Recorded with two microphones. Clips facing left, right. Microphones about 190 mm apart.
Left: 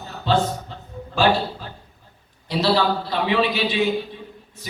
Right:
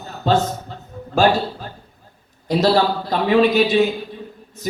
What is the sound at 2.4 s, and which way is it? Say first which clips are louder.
Speech: right 4 dB; 45° right (ahead or behind).